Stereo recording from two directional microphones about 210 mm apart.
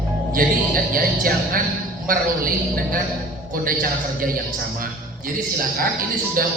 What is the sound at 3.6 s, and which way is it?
Speech, 45° right (ahead or behind).